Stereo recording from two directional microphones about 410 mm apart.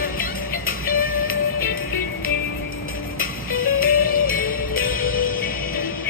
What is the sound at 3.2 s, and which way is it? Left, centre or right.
Music, left.